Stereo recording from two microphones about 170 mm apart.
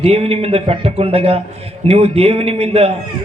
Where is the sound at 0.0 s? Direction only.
35° right (ahead or behind).